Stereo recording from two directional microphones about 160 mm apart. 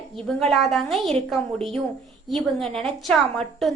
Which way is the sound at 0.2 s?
5° left (ahead or behind).